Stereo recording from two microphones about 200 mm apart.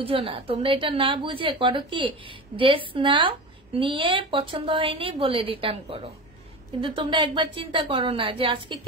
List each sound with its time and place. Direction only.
0.0 s a woman's voice: 30° right (ahead or behind)